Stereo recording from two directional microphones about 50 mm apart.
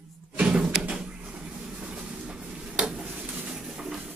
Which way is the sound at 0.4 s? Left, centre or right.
Centre.